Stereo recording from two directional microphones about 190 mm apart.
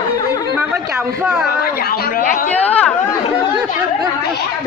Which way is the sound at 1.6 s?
55° left (ahead or behind).